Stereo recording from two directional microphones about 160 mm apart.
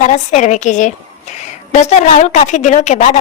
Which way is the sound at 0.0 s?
50° left (ahead or behind).